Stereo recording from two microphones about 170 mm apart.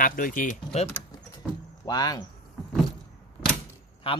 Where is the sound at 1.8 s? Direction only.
25° left (ahead or behind).